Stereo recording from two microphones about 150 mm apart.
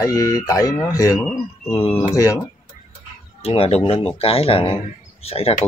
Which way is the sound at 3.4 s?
40° left (ahead or behind).